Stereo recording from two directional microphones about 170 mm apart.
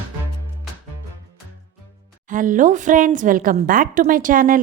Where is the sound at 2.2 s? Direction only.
50° right (ahead or behind).